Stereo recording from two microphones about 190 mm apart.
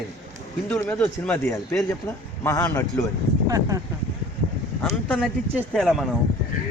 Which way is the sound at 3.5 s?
20° right (ahead or behind).